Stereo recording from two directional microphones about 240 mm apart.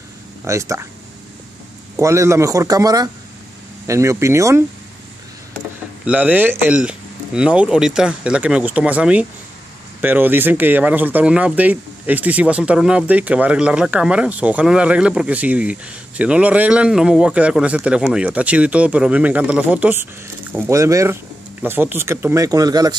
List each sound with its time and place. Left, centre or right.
0.5 s speech: centre
2.0 s speech: centre
6.0 s speech: centre